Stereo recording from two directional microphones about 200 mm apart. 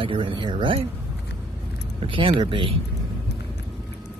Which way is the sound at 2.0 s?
25° right (ahead or behind).